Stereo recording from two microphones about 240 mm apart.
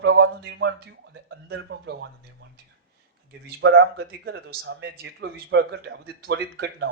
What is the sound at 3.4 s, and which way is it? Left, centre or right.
Speech, right.